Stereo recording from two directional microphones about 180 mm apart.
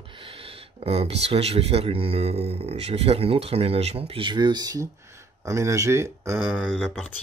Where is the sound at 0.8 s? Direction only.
35° right (ahead or behind); by 6.3 s 15° right (ahead or behind).